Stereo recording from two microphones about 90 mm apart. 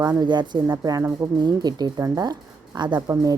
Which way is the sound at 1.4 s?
50° right (ahead or behind).